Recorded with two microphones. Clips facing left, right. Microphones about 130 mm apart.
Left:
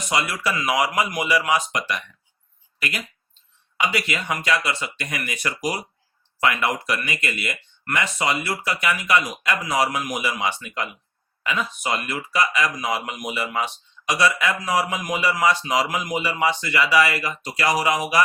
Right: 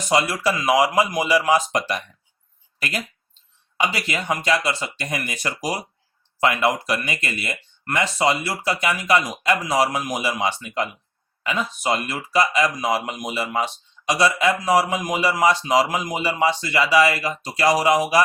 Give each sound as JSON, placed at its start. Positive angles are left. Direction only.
{"t": 0.1, "sound": "speech", "side_deg": -30}
{"t": 3.8, "sound": "speech", "side_deg": -30}